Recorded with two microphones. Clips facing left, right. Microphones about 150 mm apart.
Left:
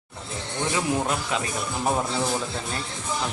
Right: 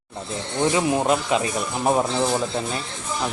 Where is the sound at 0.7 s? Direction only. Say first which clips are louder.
Right 4 dB; 20° right (ahead or behind).